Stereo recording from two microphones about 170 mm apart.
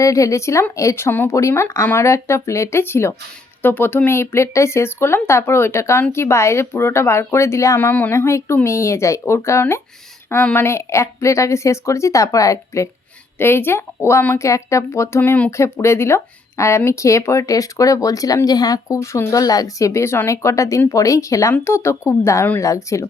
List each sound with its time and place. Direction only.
0.0 s speech: 20° left (ahead or behind)